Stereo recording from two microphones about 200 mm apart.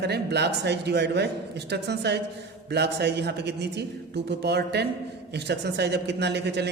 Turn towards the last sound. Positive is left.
turn(degrees=-55)  # may be behind; listen again after turning